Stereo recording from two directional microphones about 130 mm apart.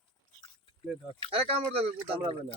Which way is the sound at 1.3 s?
50° right (ahead or behind).